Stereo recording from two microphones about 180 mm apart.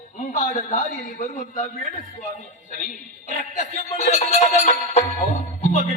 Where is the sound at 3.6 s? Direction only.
45° left (ahead or behind).